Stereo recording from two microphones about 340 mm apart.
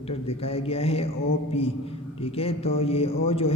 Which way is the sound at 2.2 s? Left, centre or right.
Centre.